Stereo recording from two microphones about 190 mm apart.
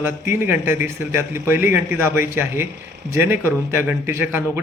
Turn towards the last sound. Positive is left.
turn(degrees=-10)  # may be behind; listen again after turning